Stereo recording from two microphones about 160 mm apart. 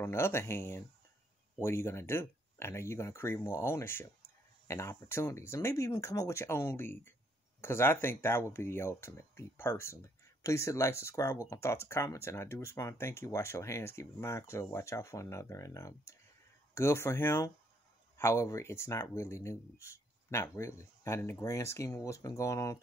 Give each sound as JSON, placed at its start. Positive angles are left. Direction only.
{"t": 0.0, "sound": "speech", "side_deg": 15}